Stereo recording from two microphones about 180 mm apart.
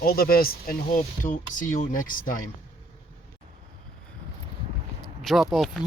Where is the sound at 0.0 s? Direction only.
55° left (ahead or behind).